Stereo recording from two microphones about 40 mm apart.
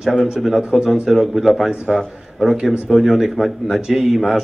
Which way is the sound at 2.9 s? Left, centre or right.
Centre.